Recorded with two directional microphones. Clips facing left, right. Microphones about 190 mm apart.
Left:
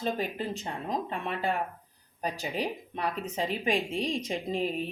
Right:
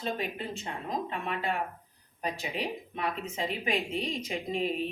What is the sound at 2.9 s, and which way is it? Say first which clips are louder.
Speech: left 2 dB; 35° left (ahead or behind).